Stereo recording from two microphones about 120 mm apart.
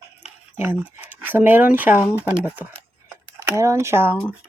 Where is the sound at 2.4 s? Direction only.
15° right (ahead or behind).